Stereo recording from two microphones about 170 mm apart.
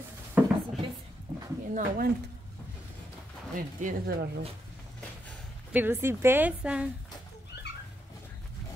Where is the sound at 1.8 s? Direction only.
60° right (ahead or behind).